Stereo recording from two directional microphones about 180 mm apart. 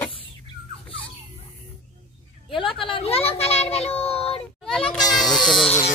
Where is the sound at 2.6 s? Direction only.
30° left (ahead or behind).